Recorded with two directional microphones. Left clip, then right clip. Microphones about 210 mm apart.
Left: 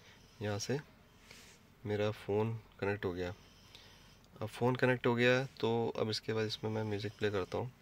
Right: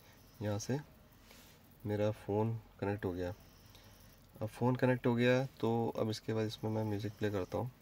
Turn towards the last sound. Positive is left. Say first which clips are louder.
# left 2 dB
turn(degrees=-5)  # may be behind; listen again after turning